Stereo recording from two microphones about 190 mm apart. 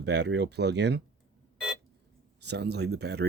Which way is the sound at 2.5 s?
60° right (ahead or behind).